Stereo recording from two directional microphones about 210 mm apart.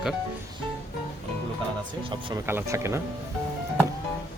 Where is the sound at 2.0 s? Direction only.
25° right (ahead or behind).